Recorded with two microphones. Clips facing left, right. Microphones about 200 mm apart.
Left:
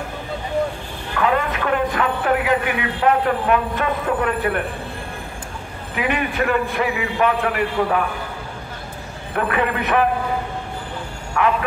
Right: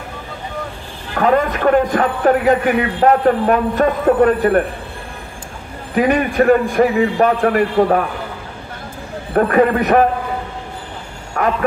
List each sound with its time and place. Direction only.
1.1 s a man's voice: 40° right (ahead or behind)
5.9 s a man's voice: 40° right (ahead or behind)
9.3 s a man's voice: 40° right (ahead or behind)
11.4 s speech: 40° right (ahead or behind)